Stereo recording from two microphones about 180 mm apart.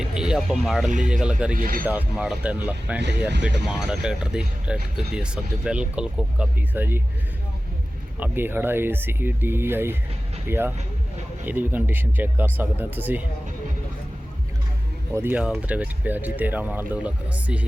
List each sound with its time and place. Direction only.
0.0 s speech: 5° right (ahead or behind)
1.5 s speech: 55° right (ahead or behind)
1.8 s speech: 10° right (ahead or behind)
8.2 s speech: 10° right (ahead or behind)
15.1 s speech: 10° right (ahead or behind)